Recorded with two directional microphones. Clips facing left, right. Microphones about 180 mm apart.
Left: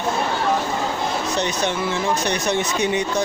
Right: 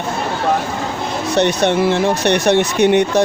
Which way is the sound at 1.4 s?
65° right (ahead or behind).